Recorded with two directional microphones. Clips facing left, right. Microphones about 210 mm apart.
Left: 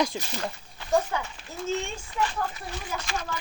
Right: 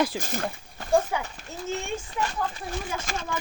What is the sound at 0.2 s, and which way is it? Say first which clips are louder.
Speech: right 3 dB; 50° right (ahead or behind).